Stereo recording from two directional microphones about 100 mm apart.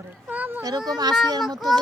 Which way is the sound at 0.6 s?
40° right (ahead or behind).